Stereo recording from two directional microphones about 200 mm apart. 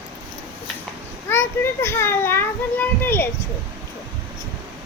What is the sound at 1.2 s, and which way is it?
A child's voice, 10° left (ahead or behind).